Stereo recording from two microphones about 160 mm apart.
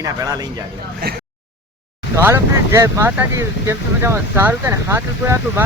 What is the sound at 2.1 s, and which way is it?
Speech, 15° right (ahead or behind).